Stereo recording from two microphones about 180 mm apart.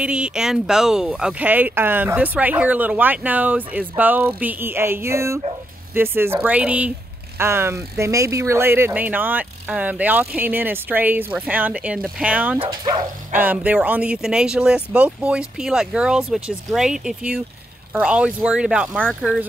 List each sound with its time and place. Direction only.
0.0 s speech: 5° right (ahead or behind)
12.5 s speech: 25° right (ahead or behind)
13.3 s speech: 10° right (ahead or behind)